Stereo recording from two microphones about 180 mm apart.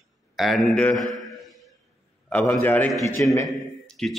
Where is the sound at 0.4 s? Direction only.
Centre (ahead or behind).